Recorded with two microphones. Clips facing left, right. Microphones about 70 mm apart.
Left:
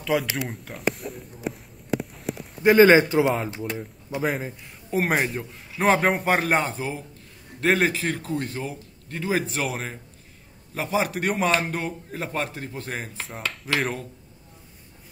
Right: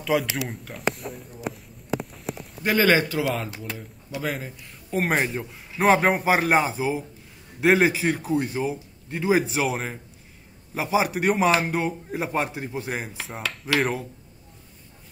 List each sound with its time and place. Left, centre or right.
0.0 s speech: centre
2.6 s speech: left
4.9 s a man's voice: centre